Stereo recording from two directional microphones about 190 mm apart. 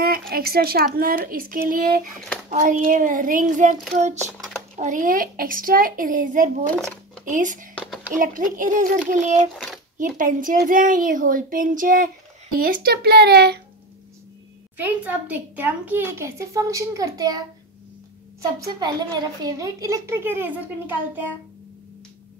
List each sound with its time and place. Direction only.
0.3 s a child's voice: 50° right (ahead or behind)
3.9 s a sound: 40° right (ahead or behind)
4.7 s a child's voice: 40° right (ahead or behind)
6.7 s speech: 5° left (ahead or behind)
7.2 s a child's voice: 45° right (ahead or behind)
9.5 s a child's voice: centre (ahead or behind)
10.1 s a child's voice: 45° right (ahead or behind)
14.8 s a child's voice: 10° right (ahead or behind)